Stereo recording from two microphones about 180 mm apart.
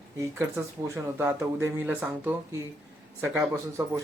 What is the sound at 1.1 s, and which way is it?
Speech, 15° right (ahead or behind).